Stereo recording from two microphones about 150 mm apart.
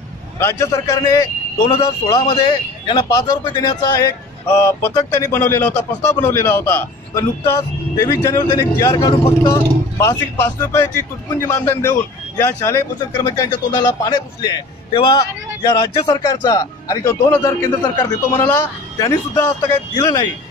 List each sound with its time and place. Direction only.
0.4 s a man's voice: 15° left (ahead or behind)